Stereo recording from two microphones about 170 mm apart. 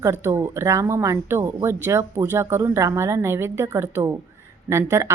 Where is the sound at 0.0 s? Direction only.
15° right (ahead or behind).